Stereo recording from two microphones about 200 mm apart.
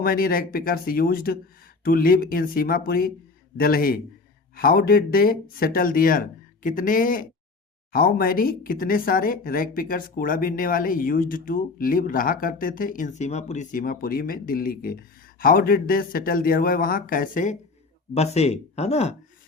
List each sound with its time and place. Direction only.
0.0 s speech: 45° left (ahead or behind)